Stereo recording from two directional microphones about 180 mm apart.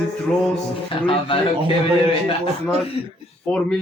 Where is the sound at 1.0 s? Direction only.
30° left (ahead or behind).